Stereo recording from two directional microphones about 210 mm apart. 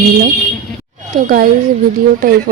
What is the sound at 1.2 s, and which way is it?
Speech, 45° right (ahead or behind).